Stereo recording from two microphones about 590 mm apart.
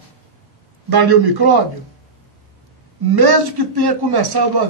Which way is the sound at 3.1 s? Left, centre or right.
Right.